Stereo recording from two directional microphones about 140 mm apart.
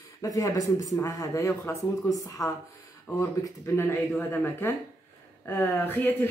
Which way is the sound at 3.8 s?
15° left (ahead or behind).